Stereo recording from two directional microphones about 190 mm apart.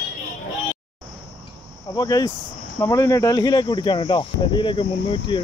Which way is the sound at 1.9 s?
20° left (ahead or behind).